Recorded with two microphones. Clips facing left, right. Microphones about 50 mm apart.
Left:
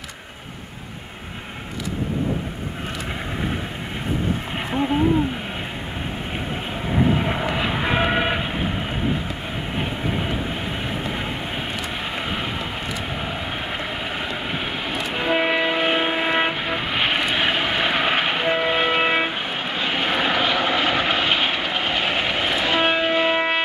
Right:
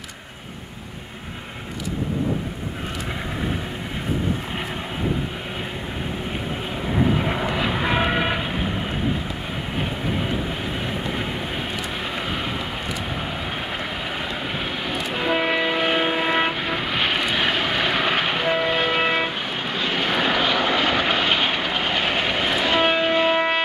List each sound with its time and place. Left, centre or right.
6.9 s vehicle: centre
12.2 s vehicle: centre
13.7 s train: centre